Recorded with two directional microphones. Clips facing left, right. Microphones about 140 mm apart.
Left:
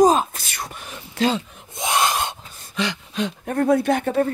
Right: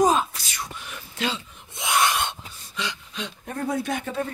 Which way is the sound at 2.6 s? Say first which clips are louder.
Left 7 dB; 60° left (ahead or behind).